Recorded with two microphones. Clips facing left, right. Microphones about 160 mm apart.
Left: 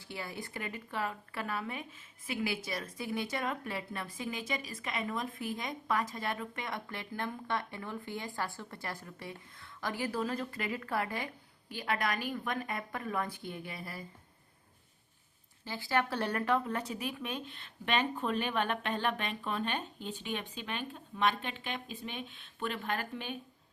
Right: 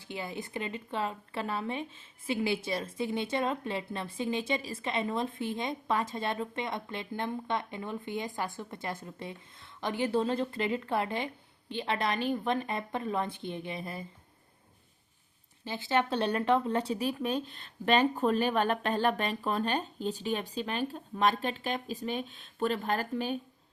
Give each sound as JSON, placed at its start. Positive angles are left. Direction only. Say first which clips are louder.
{"t": 0.0, "sound": "speech", "louder": "right 4 dB", "side_deg": -20}
{"t": 15.6, "sound": "speech", "louder": "right 3 dB", "side_deg": -20}